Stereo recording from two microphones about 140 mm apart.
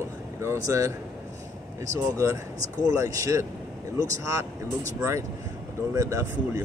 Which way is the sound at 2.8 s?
25° right (ahead or behind).